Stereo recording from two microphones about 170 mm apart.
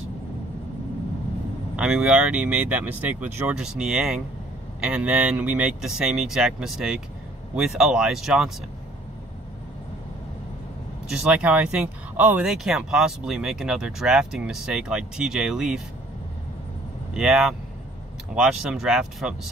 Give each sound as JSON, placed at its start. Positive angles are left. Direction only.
{"t": 1.8, "sound": "speech", "side_deg": -5}
{"t": 11.1, "sound": "speech", "side_deg": -5}
{"t": 17.1, "sound": "speech", "side_deg": -5}